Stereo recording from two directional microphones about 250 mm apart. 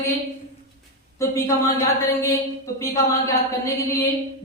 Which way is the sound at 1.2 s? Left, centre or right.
Centre.